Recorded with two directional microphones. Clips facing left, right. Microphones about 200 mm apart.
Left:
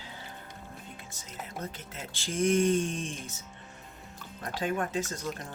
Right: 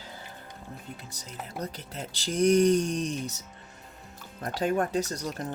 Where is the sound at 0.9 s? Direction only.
40° right (ahead or behind).